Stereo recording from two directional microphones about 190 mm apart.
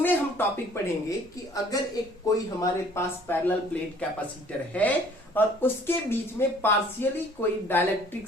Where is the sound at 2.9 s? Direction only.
10° left (ahead or behind).